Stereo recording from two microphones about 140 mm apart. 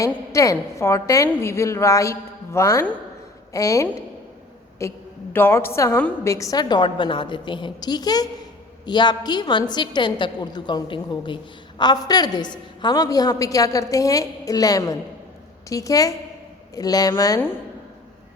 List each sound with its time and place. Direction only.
0.0 s a woman's voice: 25° left (ahead or behind)